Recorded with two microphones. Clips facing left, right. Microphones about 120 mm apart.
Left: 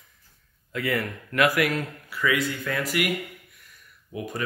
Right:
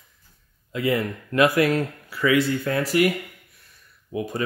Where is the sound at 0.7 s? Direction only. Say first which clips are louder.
Right 4 dB; 20° right (ahead or behind); by 3.1 s 35° right (ahead or behind).